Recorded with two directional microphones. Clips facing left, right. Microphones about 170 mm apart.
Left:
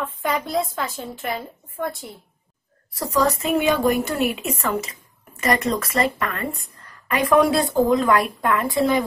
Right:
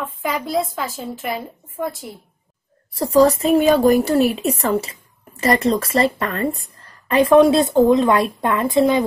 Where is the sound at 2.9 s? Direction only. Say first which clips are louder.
Right 7 dB; 30° right (ahead or behind).